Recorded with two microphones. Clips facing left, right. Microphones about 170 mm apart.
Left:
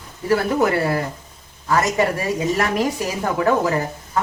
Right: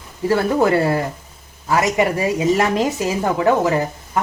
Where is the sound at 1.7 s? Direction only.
15° right (ahead or behind).